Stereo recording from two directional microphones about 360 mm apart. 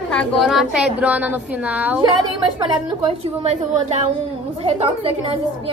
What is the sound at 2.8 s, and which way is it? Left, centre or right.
A woman's voice, centre.